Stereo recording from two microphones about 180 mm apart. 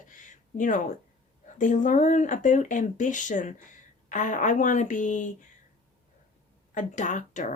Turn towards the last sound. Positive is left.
turn(degrees=45)  # may be behind; listen again after turning